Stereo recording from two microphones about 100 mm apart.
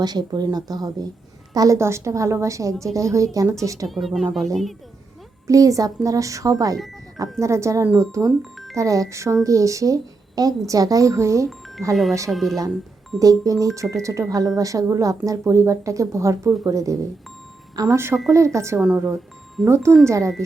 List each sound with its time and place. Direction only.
0.0 s speech: 45° right (ahead or behind)
3.8 s speech: centre (ahead or behind)
5.5 s speech: 35° right (ahead or behind)
8.4 s speech: centre (ahead or behind)
8.7 s speech: 35° right (ahead or behind)
12.3 s speech: centre (ahead or behind)
13.1 s speech: 35° right (ahead or behind)
18.8 s speech: 15° right (ahead or behind); by 20.3 s 30° right (ahead or behind)